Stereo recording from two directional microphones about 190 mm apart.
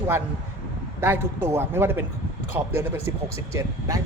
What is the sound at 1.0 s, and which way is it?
Speech, 10° right (ahead or behind).